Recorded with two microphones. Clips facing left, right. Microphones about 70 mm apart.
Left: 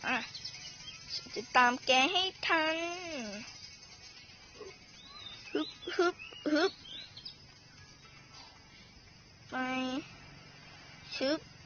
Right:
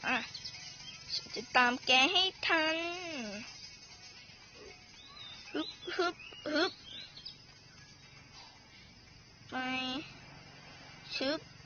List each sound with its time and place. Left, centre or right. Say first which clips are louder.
0.0 s child singing: even; centre
1.3 s child singing: left 2 dB; centre
5.9 s speech: left 4 dB; centre
6.4 s a sound: left 3 dB; centre
6.8 s a sound: left 1 dB; right
9.5 s speech: left 3 dB; centre
11.1 s speech: left 3 dB; centre